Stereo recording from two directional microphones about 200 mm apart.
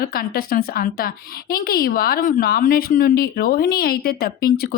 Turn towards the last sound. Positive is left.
turn(degrees=50)  # may be behind; listen again after turning